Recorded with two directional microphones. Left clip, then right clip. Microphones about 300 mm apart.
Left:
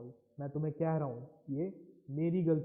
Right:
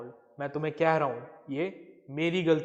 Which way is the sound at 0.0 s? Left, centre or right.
Centre.